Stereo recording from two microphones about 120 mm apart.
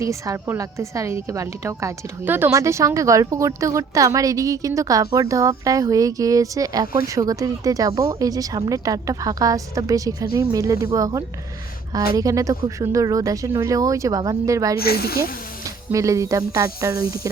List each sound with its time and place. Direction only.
0.0 s a woman's voice: 25° right (ahead or behind)